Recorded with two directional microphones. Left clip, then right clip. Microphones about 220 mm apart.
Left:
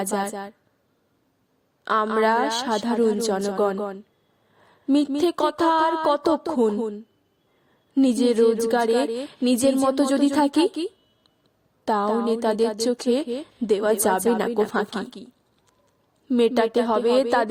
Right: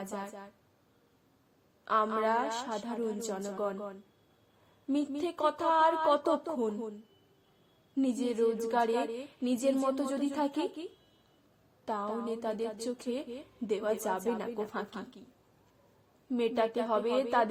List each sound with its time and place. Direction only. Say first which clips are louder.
0.0 s speech: left 14 dB; 50° left (ahead or behind)
1.8 s speech: left 9 dB; 50° left (ahead or behind)
7.9 s speech: left 12 dB; 45° left (ahead or behind)
11.9 s speech: left 13 dB; 50° left (ahead or behind)
16.3 s speech: left 11 dB; 45° left (ahead or behind)